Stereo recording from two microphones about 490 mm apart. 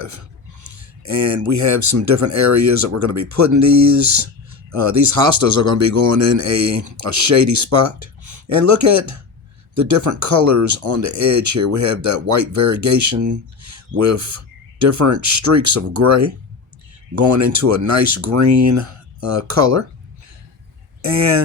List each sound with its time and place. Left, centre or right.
0.6 s speech: right
21.0 s speech: right